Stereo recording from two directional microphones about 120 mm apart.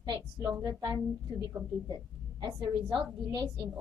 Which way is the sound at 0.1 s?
25° right (ahead or behind).